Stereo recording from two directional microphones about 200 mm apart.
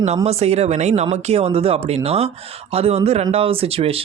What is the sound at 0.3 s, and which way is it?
Speech, 30° right (ahead or behind).